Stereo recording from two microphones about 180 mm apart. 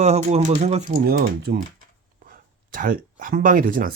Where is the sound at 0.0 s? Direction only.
35° right (ahead or behind).